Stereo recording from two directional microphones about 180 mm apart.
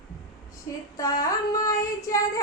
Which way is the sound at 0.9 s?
20° left (ahead or behind).